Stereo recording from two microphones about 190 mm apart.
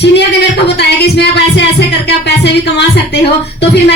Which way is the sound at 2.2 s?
65° left (ahead or behind).